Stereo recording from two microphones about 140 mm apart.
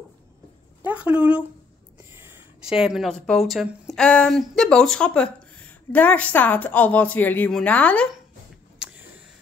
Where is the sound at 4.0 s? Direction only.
5° left (ahead or behind).